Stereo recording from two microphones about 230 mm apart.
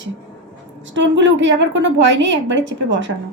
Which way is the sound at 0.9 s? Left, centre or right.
Right.